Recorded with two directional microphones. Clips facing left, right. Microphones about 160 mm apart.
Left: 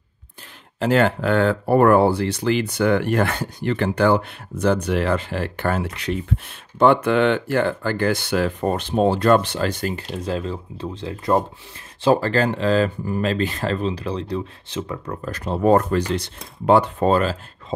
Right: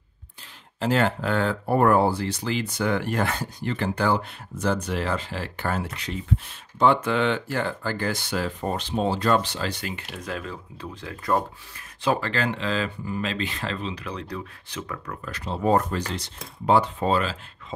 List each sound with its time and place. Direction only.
0.7 s speech: 65° left (ahead or behind); by 15.1 s 25° left (ahead or behind)
15.2 s speech: 50° left (ahead or behind)